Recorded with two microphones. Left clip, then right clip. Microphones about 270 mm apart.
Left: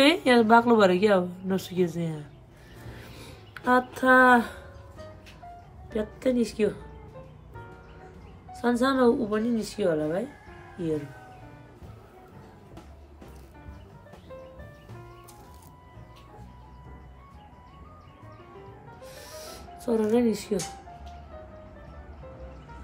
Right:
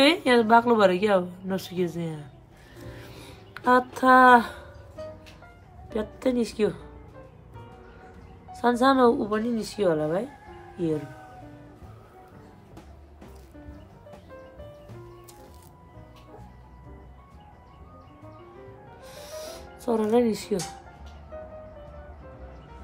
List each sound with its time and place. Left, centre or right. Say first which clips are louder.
0.0 s a woman's voice: even; centre
2.9 s a sound: even; centre
5.9 s a woman's voice: even; centre
8.5 s a woman's voice: right 4 dB; centre
18.9 s music: right 4 dB; centre